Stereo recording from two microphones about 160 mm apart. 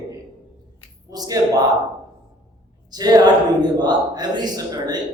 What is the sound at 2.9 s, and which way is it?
Speech, 25° right (ahead or behind).